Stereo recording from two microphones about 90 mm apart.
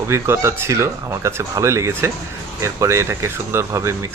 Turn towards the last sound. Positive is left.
turn(degrees=-30)  # may be behind; listen again after turning